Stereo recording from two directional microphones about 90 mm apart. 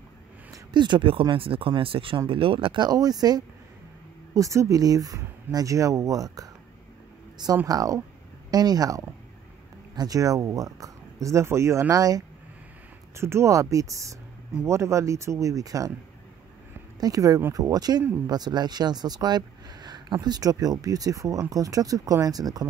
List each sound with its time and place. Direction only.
0.7 s speech: 60° right (ahead or behind)
1.3 s speech: 90° right; by 3.4 s 45° right (ahead or behind)
4.3 s speech: 35° right (ahead or behind)
7.6 s speech: 40° right (ahead or behind)
11.9 s speech: 45° right (ahead or behind)
13.1 s speech: 30° right (ahead or behind)
17.0 s speech: 40° right (ahead or behind)